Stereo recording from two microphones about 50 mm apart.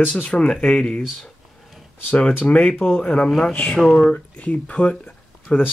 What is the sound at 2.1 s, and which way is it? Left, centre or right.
Speech, left.